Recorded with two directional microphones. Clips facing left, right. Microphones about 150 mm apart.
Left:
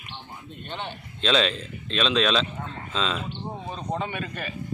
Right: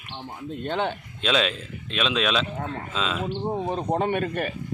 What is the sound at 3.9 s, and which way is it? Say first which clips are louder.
Speech: right 6 dB; 55° right (ahead or behind).